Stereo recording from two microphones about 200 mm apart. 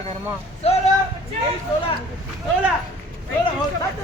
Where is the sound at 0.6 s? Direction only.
30° left (ahead or behind).